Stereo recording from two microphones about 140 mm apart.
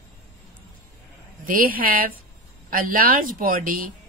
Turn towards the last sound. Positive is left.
turn(degrees=-85)